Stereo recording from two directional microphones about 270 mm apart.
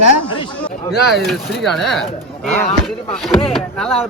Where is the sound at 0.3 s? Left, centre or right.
Centre.